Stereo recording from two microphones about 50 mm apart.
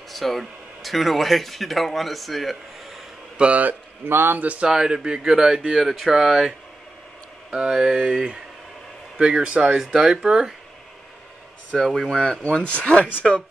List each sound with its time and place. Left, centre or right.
0.1 s speech: centre
3.3 s speech: right
3.6 s a man's voice: right
4.4 s speech: right
4.6 s speech: centre
7.5 s speech: centre
11.8 s speech: centre